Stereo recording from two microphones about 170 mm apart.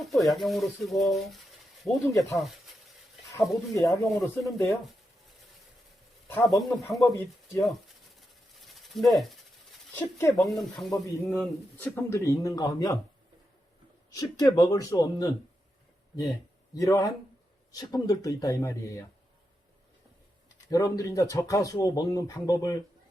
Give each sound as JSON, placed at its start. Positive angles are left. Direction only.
{"t": 0.0, "sound": "speech", "side_deg": 0}
{"t": 6.4, "sound": "speech", "side_deg": 0}
{"t": 7.6, "sound": "a sound", "side_deg": 0}
{"t": 8.6, "sound": "snake", "side_deg": 0}
{"t": 9.9, "sound": "speech", "side_deg": 15}
{"t": 10.4, "sound": "speech", "side_deg": 0}
{"t": 11.8, "sound": "speech", "side_deg": 15}
{"t": 14.2, "sound": "speech", "side_deg": 20}
{"t": 16.1, "sound": "speech", "side_deg": 0}
{"t": 16.7, "sound": "speech", "side_deg": 20}
{"t": 20.7, "sound": "speech", "side_deg": 20}